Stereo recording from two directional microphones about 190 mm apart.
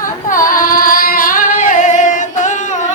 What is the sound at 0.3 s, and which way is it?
Female singing, 45° left (ahead or behind).